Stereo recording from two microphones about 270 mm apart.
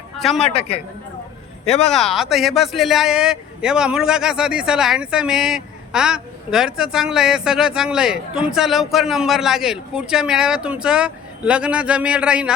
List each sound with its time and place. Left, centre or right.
0.2 s a man's voice: centre
1.6 s speech: left
1.9 s a man's voice: centre